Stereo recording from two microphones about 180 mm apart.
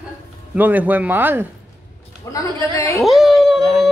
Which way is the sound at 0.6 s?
10° right (ahead or behind).